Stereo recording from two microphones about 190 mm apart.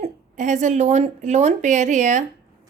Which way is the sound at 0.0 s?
40° right (ahead or behind).